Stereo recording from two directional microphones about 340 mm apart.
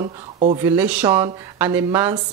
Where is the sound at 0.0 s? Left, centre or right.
Centre.